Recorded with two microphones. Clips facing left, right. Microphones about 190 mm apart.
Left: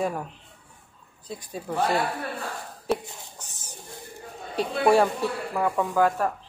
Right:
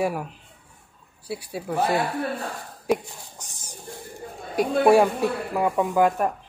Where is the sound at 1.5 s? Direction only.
10° right (ahead or behind).